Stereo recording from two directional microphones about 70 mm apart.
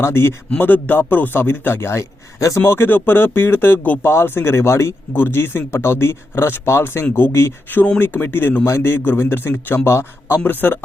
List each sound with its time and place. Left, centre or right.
0.0 s a man's voice: left
2.6 s a man's voice: left